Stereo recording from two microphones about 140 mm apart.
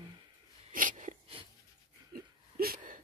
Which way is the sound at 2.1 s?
90° right.